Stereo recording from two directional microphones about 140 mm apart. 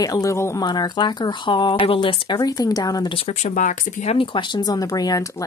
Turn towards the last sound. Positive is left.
turn(degrees=25)  # may be behind; listen again after turning